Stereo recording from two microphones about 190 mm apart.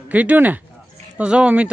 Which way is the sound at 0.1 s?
10° right (ahead or behind).